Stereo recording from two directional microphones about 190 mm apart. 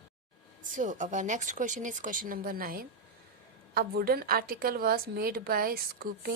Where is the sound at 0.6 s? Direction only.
40° right (ahead or behind).